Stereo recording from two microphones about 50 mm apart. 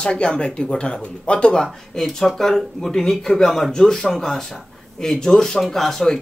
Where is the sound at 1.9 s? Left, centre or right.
Centre.